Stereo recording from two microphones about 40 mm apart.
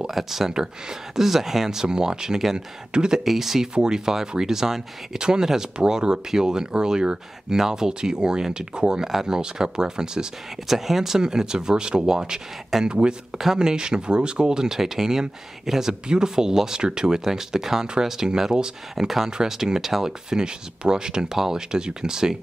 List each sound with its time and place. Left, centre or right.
0.0 s speech: centre
0.5 s speech: centre
3.3 s speech: centre
3.7 s speech: centre
9.0 s speech: centre